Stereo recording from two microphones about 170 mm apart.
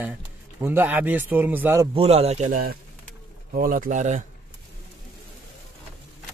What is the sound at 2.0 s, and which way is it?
Speech, 35° right (ahead or behind).